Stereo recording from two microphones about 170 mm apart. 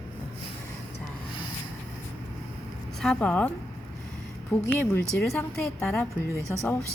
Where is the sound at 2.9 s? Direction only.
5° left (ahead or behind).